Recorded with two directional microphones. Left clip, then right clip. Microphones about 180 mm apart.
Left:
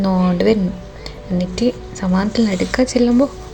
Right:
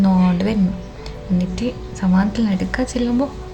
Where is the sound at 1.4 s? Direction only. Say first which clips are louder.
Left 7 dB; 25° left (ahead or behind).